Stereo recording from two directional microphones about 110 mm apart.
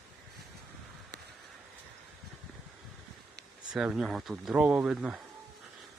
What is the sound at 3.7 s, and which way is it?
Speech, 5° right (ahead or behind).